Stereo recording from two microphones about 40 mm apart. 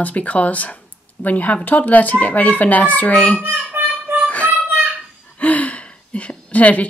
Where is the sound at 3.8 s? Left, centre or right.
Right.